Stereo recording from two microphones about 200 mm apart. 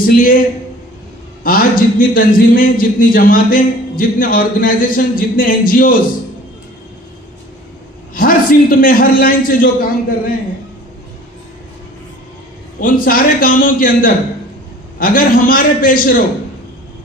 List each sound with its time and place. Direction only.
0.0 s a man's voice: 45° left (ahead or behind)
1.4 s a man's voice: 45° left (ahead or behind)
8.1 s a man's voice: 45° left (ahead or behind)
12.8 s a man's voice: 45° left (ahead or behind)